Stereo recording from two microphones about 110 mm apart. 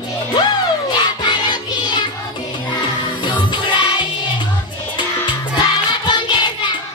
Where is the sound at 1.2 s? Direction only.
40° left (ahead or behind).